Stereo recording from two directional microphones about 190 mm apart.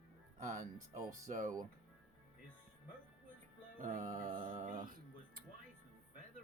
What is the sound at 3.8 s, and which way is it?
Music, 40° right (ahead or behind).